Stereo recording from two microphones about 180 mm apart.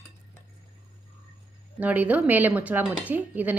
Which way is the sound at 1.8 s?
10° right (ahead or behind).